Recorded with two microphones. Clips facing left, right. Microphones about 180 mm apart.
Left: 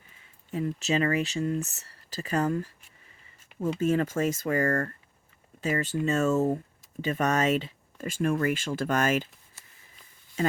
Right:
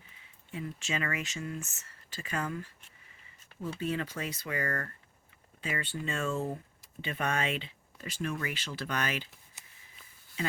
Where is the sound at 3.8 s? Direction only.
45° left (ahead or behind).